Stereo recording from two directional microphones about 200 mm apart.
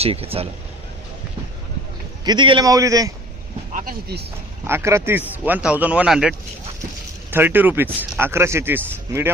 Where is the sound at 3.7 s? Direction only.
45° right (ahead or behind).